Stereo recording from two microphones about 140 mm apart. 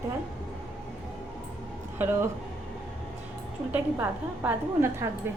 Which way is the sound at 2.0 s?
15° right (ahead or behind).